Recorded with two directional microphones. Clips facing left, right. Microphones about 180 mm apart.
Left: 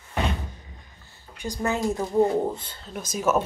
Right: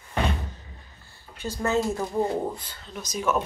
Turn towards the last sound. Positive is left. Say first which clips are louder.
# left 3 dB
turn(degrees=45)  # may be behind; listen again after turning